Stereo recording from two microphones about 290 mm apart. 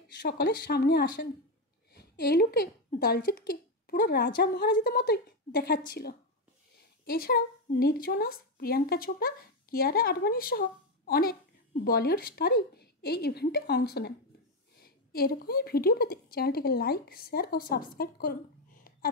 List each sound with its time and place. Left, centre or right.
0.2 s a woman's voice: left
15.1 s a woman's voice: left